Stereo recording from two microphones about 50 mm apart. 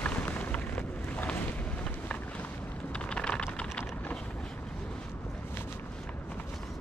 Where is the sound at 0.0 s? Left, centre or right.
Left.